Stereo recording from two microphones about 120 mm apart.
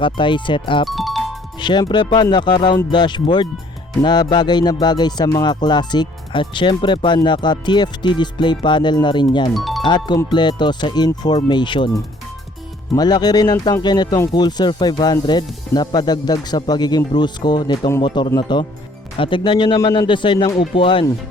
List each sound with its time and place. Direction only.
0.0 s speech: 40° left (ahead or behind)
0.9 s music: centre (ahead or behind)
1.5 s speech: 40° left (ahead or behind)
9.6 s speech: centre (ahead or behind)
9.8 s speech: 40° left (ahead or behind)
12.9 s speech: 35° left (ahead or behind)